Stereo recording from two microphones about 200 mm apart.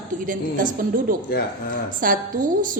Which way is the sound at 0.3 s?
45° right (ahead or behind).